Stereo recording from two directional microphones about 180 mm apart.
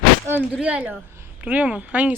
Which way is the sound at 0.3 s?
10° right (ahead or behind).